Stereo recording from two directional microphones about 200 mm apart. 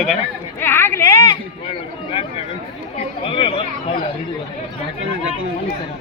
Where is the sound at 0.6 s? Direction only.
10° left (ahead or behind).